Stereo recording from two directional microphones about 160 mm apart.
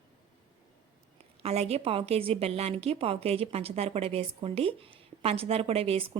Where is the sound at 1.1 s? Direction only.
40° right (ahead or behind).